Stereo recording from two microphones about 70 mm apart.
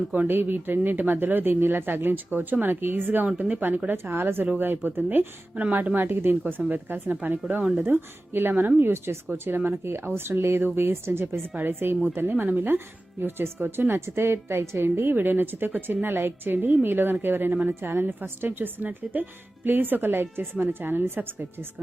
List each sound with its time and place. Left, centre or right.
0.1 s a woman's voice: right
5.5 s a woman's voice: centre